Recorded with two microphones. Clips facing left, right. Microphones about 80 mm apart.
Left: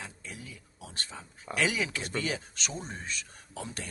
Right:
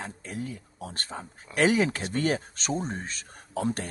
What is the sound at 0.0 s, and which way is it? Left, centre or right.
Speech, right.